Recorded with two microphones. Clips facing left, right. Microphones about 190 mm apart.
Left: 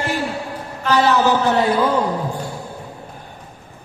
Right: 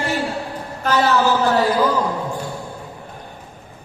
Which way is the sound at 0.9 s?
40° right (ahead or behind).